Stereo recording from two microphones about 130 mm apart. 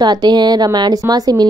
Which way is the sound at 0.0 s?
30° right (ahead or behind).